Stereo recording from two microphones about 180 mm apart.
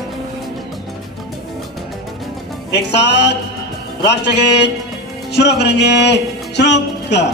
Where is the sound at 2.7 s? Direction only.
70° left (ahead or behind).